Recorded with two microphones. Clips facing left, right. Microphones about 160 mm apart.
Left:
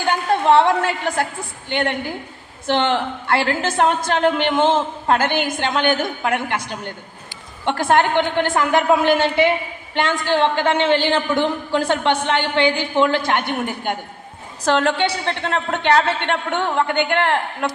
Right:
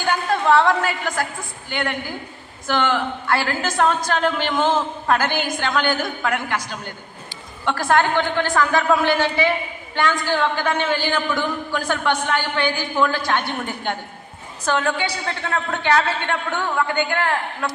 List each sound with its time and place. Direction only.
0.0 s a woman's voice: 25° left (ahead or behind)
7.6 s a woman's voice: 20° left (ahead or behind)
15.0 s a woman's voice: 25° left (ahead or behind)
16.9 s a woman's voice: 65° left (ahead or behind)